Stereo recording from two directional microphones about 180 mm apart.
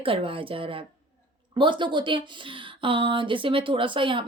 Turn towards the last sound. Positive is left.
turn(degrees=-25)  # may be behind; listen again after turning